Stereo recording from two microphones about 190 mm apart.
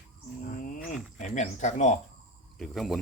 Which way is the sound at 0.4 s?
45° left (ahead or behind).